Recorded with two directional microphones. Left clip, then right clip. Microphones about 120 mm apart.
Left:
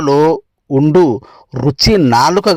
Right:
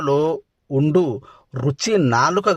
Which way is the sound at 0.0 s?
25° left (ahead or behind).